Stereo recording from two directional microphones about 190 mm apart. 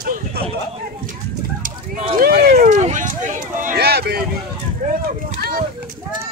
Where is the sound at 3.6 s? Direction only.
50° right (ahead or behind).